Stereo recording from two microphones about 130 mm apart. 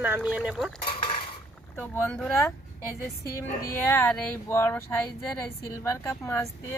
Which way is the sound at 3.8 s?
15° left (ahead or behind).